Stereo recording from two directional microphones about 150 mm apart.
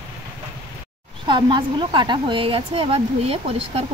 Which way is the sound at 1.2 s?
30° right (ahead or behind).